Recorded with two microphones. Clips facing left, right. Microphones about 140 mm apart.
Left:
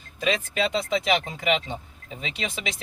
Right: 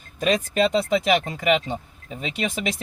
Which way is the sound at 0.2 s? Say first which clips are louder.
Right 5 dB; 45° right (ahead or behind).